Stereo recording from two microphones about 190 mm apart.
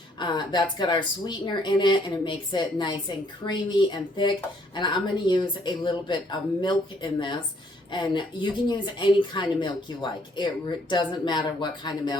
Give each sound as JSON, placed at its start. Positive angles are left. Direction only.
{"t": 0.2, "sound": "speech", "side_deg": 20}